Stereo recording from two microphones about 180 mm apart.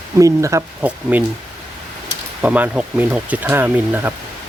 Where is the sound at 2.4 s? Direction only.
5° right (ahead or behind).